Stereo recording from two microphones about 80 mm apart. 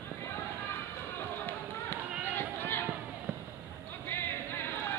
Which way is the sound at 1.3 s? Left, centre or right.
Left.